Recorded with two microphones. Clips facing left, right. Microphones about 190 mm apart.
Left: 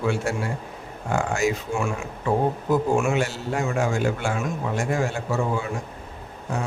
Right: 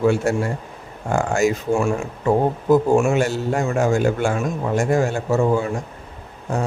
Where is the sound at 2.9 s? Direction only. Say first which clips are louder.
Right 5 dB; 40° right (ahead or behind).